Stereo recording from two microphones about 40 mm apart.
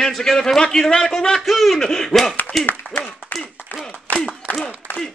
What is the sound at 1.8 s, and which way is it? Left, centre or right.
Speech, centre.